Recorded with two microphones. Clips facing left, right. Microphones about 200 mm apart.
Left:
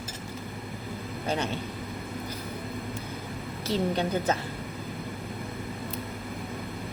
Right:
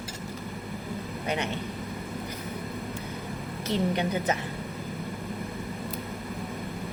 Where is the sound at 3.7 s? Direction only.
20° right (ahead or behind).